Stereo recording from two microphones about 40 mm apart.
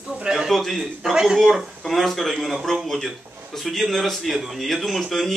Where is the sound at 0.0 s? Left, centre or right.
Right.